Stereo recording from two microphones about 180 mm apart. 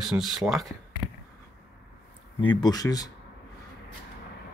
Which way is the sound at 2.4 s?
25° left (ahead or behind).